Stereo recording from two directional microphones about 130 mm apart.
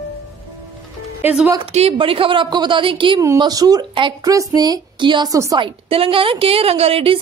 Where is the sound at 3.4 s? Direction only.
30° right (ahead or behind).